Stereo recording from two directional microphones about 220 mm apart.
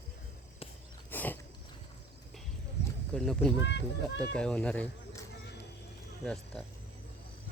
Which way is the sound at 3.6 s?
55° left (ahead or behind).